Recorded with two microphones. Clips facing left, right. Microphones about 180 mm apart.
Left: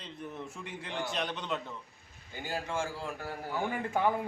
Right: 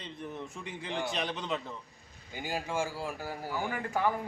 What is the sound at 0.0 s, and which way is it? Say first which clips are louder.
A man's voice: right 1 dB; centre (ahead or behind).